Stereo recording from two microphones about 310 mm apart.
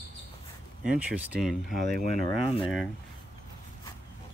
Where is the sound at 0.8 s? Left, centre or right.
Centre.